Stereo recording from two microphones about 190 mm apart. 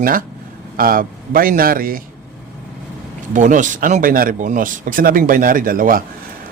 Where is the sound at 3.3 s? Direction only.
40° right (ahead or behind).